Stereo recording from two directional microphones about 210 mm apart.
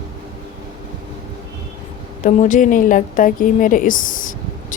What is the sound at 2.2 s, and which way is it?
Speech, 35° left (ahead or behind).